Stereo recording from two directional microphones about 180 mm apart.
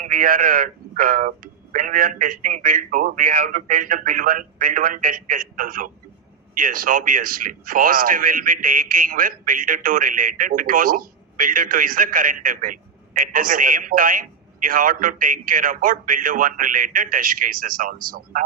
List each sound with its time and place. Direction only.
0.0 s a man's voice: 50° right (ahead or behind)